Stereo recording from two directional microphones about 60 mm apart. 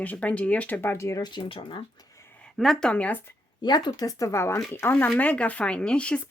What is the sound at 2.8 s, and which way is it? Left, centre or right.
Speech, centre.